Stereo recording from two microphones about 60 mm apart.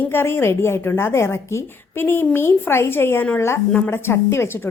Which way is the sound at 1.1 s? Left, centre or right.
Left.